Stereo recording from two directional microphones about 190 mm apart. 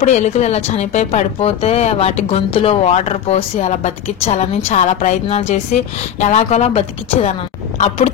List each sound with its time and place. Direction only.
0.0 s speech: 40° left (ahead or behind)